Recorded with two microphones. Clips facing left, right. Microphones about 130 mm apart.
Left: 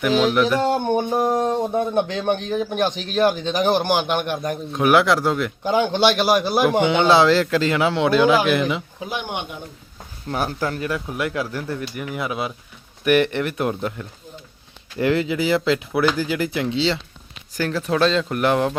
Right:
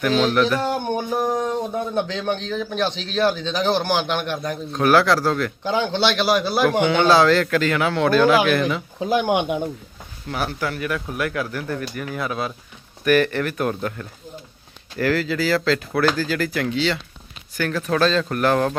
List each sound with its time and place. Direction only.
0.0 s speech: 15° left (ahead or behind)
2.9 s speech: 50° left (ahead or behind)
3.2 s speech: 15° left (ahead or behind)
10.2 s speech: 35° left (ahead or behind); by 18.8 s 15° left (ahead or behind)